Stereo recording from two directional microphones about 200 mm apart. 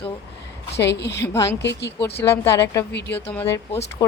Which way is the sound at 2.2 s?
15° left (ahead or behind).